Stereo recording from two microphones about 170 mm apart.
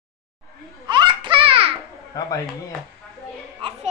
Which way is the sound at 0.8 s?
25° right (ahead or behind).